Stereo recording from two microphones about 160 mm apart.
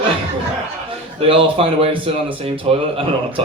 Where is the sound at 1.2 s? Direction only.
35° right (ahead or behind).